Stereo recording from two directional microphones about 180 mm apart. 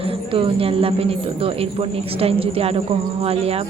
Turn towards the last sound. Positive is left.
turn(degrees=-35)  # may be behind; listen again after turning